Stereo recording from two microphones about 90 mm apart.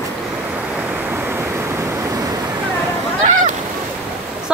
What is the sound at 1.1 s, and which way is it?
Waves, 25° right (ahead or behind).